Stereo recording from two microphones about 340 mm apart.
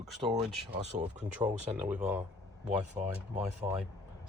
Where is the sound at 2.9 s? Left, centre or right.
Centre.